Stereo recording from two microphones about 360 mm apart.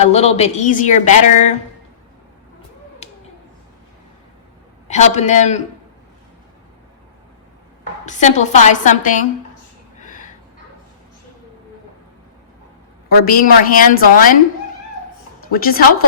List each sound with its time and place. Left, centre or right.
0.0 s speech: centre
4.9 s speech: centre
8.0 s speech: centre
10.0 s a sound: left
13.1 s speech: left
15.5 s speech: left